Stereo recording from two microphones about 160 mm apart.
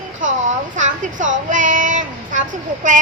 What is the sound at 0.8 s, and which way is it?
A child's voice, 50° right (ahead or behind).